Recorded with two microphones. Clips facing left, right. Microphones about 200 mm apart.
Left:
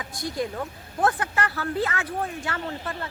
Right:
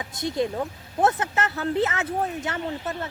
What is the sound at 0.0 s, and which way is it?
Speech, 20° right (ahead or behind).